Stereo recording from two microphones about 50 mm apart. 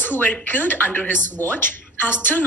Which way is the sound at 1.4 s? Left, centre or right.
Left.